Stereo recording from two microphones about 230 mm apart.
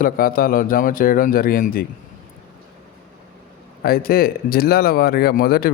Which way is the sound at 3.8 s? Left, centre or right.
Left.